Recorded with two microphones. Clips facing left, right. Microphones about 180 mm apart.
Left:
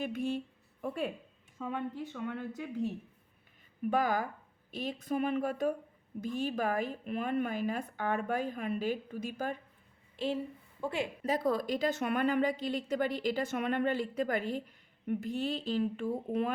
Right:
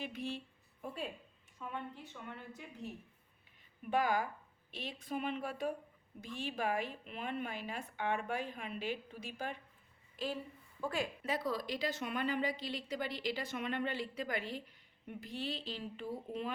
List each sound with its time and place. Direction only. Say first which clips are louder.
0.0 s speech: left 8 dB; 50° left (ahead or behind)
1.5 s speech: left 8 dB; 90° left
3.8 s a woman's voice: left 3 dB; 40° left (ahead or behind)
10.2 s a woman's voice: left 6 dB; 30° left (ahead or behind)
11.2 s a woman's voice: left 7 dB; 45° left (ahead or behind)